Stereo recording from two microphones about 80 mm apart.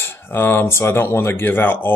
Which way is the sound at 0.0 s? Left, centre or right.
Left.